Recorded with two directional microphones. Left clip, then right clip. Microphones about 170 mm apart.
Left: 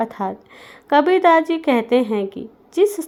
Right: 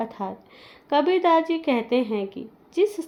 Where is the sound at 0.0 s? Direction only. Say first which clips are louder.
Left 7 dB; 35° left (ahead or behind).